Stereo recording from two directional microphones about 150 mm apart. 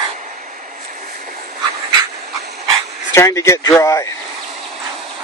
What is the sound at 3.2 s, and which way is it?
Speech, 20° left (ahead or behind).